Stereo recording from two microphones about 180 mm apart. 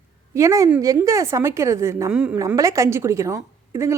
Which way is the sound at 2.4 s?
20° right (ahead or behind).